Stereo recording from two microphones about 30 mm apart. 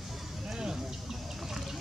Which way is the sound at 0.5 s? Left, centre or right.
Centre.